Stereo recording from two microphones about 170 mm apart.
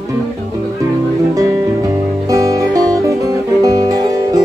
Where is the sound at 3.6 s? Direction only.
20° right (ahead or behind).